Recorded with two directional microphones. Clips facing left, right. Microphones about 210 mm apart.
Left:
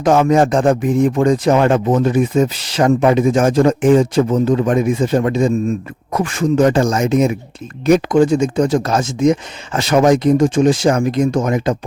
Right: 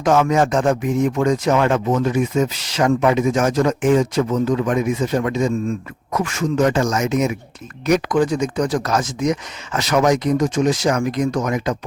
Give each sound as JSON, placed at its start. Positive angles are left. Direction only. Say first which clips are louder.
{"t": 0.0, "sound": "speech", "louder": "left 4 dB", "side_deg": 35}